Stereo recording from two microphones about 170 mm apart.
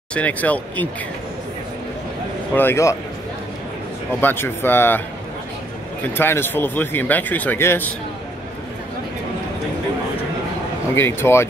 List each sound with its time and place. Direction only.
0.1 s speech: 10° left (ahead or behind)
2.5 s speech: 15° left (ahead or behind)
4.2 s speech: 10° left (ahead or behind)
6.1 s speech: 15° left (ahead or behind)
11.0 s speech: 15° left (ahead or behind)